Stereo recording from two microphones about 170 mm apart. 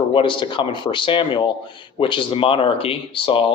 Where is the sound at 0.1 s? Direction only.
30° left (ahead or behind).